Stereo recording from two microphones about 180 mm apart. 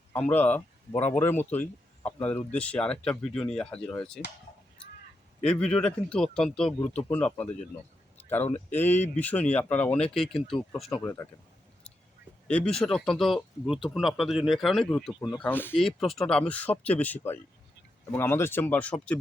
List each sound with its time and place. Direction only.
0.1 s speech: 10° left (ahead or behind)
5.4 s speech: 5° left (ahead or behind)
8.7 s speech: 10° left (ahead or behind)
11.0 s speech: 15° left (ahead or behind)
12.5 s speech: 5° left (ahead or behind)
15.4 s speech: 10° left (ahead or behind)